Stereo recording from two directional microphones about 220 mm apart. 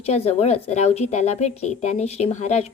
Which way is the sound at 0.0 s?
30° left (ahead or behind).